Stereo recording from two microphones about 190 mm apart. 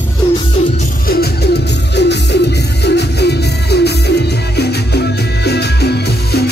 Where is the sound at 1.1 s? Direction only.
55° left (ahead or behind).